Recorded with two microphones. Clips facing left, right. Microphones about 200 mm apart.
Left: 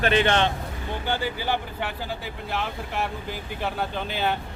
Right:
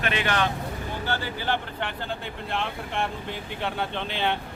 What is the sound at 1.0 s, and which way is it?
Speech, 15° left (ahead or behind).